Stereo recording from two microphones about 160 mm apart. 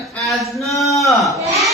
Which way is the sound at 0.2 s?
Centre (ahead or behind).